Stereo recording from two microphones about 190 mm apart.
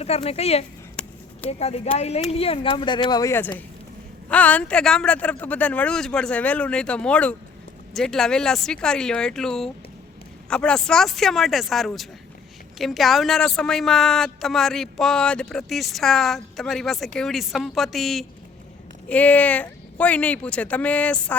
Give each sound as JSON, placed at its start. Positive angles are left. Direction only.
{"t": 0.0, "sound": "speech", "side_deg": 35}
{"t": 1.0, "sound": "a sound", "side_deg": 5}
{"t": 1.5, "sound": "a man's voice", "side_deg": 35}